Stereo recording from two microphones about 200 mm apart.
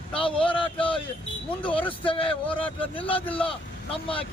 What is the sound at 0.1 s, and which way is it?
Speech, 25° left (ahead or behind).